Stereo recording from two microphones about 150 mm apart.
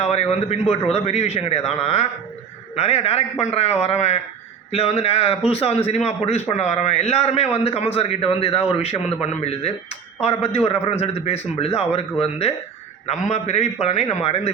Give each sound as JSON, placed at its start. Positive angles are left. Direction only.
{"t": 0.0, "sound": "a man's voice", "side_deg": 45}